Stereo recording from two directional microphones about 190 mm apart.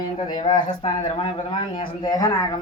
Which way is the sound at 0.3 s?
20° left (ahead or behind).